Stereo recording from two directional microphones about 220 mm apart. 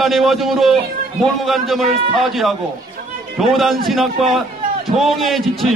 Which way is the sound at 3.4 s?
Centre (ahead or behind).